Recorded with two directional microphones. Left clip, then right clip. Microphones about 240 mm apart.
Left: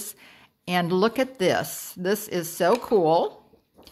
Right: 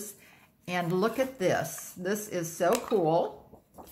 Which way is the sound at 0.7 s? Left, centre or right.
Left.